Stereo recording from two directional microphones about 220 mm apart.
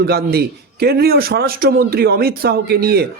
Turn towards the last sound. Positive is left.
turn(degrees=-45)  # may be behind; listen again after turning